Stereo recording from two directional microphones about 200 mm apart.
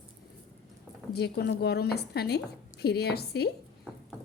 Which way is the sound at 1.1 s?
55° left (ahead or behind).